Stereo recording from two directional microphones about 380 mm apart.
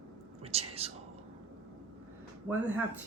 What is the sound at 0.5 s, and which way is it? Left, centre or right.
Whispering, centre.